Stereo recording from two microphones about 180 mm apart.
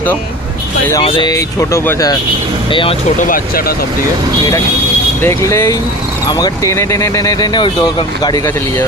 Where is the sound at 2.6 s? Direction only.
30° left (ahead or behind).